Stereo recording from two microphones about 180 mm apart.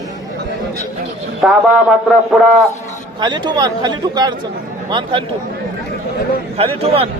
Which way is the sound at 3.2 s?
25° right (ahead or behind).